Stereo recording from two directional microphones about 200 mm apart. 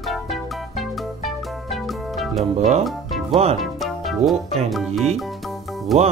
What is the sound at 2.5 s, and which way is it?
Speech, 35° right (ahead or behind).